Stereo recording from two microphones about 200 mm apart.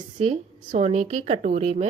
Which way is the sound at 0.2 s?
35° right (ahead or behind).